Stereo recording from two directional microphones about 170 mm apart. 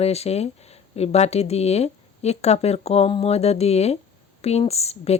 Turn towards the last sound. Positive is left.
turn(degrees=35)  # may be behind; listen again after turning